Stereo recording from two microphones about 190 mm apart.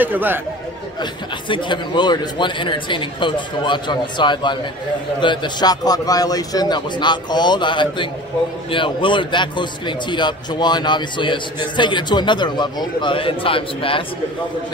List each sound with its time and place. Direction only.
0.0 s speech: 10° right (ahead or behind)
1.5 s a man's voice: 25° left (ahead or behind)